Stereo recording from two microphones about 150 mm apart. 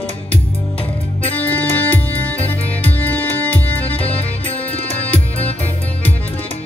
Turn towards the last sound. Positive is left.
turn(degrees=10)  # may be behind; listen again after turning